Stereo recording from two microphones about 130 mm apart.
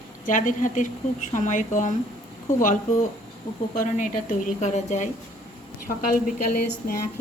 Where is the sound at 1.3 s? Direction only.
75° left (ahead or behind).